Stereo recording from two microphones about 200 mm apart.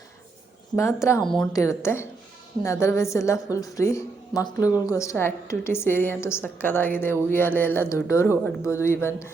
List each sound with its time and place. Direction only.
0.8 s a woman's voice: 15° left (ahead or behind)
1.2 s a woman's voice: 5° left (ahead or behind)
1.5 s a woman's voice: 15° left (ahead or behind)